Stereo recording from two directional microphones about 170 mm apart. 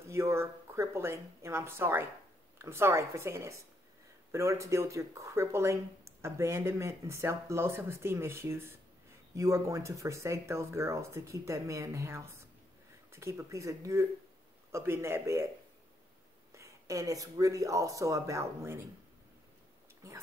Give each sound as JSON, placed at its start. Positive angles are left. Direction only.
{"t": 0.0, "sound": "speech", "side_deg": -15}
{"t": 16.5, "sound": "speech", "side_deg": -20}